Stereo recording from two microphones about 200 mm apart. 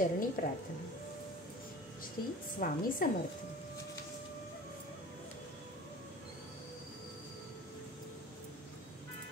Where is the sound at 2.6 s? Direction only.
45° left (ahead or behind).